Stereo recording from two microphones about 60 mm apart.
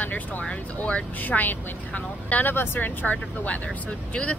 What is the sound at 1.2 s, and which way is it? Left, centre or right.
A woman's voice, left.